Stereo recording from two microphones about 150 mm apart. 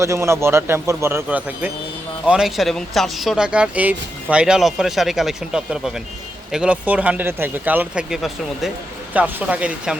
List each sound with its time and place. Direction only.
0.0 s speech: 20° right (ahead or behind)